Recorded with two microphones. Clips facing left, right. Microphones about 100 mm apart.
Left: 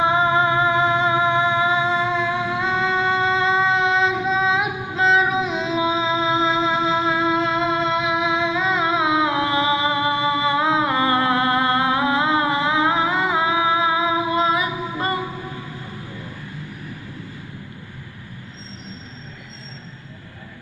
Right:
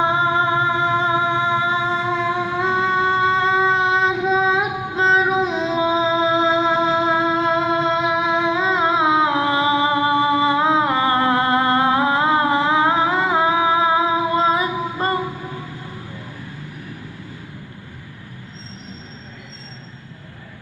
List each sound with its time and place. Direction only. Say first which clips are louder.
0.1 s music: even; 35° right (ahead or behind)